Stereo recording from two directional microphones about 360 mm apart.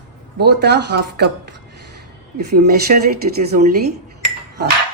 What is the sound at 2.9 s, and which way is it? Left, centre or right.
Speech, right.